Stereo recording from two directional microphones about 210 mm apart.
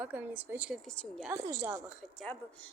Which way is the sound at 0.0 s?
10° right (ahead or behind).